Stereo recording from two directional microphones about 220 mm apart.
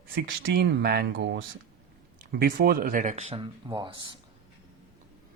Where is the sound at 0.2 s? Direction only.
45° right (ahead or behind); by 3.9 s 20° right (ahead or behind).